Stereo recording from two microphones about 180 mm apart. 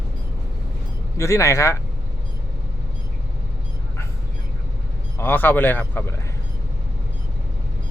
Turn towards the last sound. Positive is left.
turn(degrees=10)  # may be behind; listen again after turning